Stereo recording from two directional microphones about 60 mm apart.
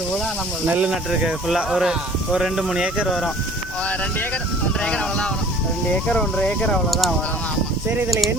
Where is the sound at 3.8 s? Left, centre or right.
Left.